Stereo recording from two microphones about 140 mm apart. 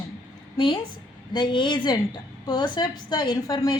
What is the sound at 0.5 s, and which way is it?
A woman's voice, 35° left (ahead or behind).